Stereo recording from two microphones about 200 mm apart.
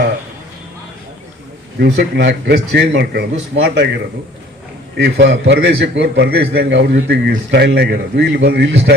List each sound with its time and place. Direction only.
1.8 s a man's voice: 55° right (ahead or behind)
4.9 s a man's voice: 60° right (ahead or behind)